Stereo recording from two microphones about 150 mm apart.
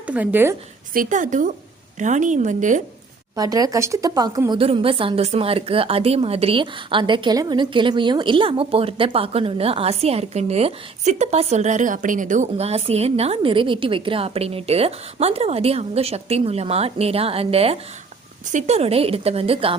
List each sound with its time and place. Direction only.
0.1 s a woman's voice: 10° right (ahead or behind)
0.9 s a woman's voice: 60° right (ahead or behind)
3.3 s speech: 25° right (ahead or behind)
4.5 s a woman's voice: 40° right (ahead or behind)